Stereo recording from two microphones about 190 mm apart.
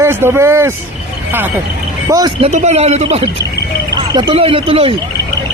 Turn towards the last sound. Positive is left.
turn(degrees=-30)  # may be behind; listen again after turning